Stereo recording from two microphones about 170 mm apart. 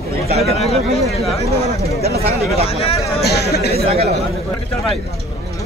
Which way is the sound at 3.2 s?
70° left (ahead or behind).